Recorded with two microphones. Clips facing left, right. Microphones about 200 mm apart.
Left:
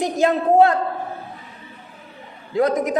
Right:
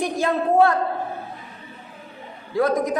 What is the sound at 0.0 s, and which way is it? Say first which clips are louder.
Speech: left 3 dB; 20° left (ahead or behind).